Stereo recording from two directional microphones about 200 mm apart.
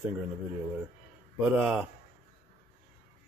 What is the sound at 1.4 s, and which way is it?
Speech, 5° right (ahead or behind).